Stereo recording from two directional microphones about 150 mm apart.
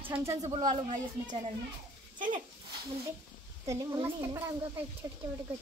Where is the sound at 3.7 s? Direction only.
20° right (ahead or behind).